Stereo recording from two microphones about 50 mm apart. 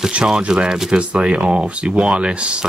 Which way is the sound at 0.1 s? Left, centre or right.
Right.